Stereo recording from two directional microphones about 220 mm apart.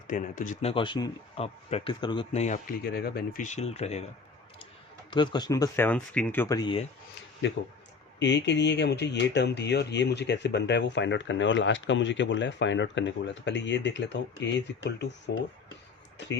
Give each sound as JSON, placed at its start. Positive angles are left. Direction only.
{"t": 0.1, "sound": "speech", "side_deg": 35}
{"t": 2.8, "sound": "speech", "side_deg": 45}
{"t": 5.1, "sound": "speech", "side_deg": 20}
{"t": 7.4, "sound": "speech", "side_deg": 60}